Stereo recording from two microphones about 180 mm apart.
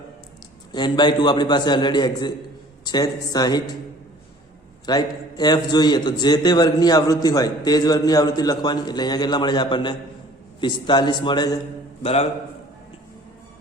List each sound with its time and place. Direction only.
0.7 s a man's voice: 25° left (ahead or behind)
4.9 s a man's voice: 25° left (ahead or behind)
12.0 s a man's voice: 35° left (ahead or behind)